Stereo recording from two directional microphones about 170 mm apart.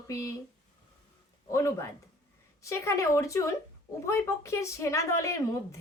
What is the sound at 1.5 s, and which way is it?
A woman's voice, 15° left (ahead or behind).